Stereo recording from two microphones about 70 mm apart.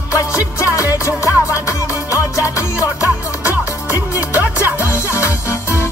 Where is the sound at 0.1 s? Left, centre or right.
Left.